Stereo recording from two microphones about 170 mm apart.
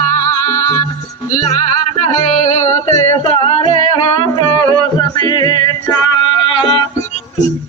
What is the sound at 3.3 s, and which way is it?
Singing, 35° left (ahead or behind).